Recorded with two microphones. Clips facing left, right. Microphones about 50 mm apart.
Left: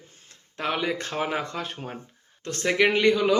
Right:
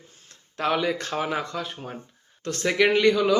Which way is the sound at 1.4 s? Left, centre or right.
Left.